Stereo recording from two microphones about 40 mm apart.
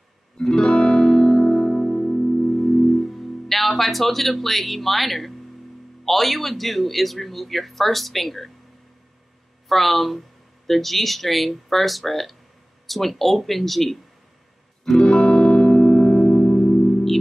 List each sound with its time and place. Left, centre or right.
0.4 s music: centre
2.5 s music: centre
6.0 s a man's voice: centre
9.7 s a man's voice: centre
14.9 s music: centre